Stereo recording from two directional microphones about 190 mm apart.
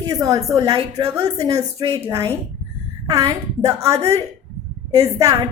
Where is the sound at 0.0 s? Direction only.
20° right (ahead or behind).